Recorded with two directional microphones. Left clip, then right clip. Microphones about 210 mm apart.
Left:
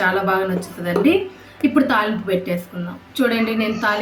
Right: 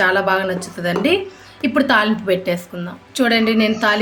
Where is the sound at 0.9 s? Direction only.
55° right (ahead or behind).